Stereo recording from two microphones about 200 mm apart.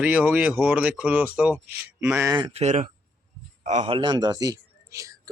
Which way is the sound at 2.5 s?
35° right (ahead or behind).